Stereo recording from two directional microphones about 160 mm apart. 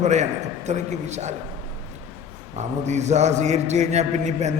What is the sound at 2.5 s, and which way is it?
Speech, 45° right (ahead or behind).